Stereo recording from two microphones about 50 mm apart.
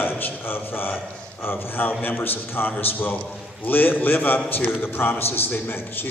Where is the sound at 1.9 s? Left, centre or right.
Left.